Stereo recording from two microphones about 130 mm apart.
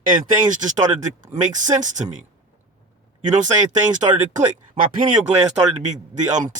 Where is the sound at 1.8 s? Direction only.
70° right (ahead or behind).